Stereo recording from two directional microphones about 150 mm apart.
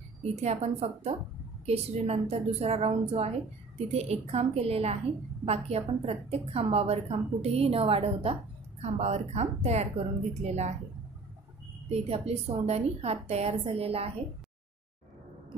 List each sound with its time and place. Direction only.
0.2 s a woman's voice: 45° right (ahead or behind)
11.9 s a woman's voice: 40° right (ahead or behind)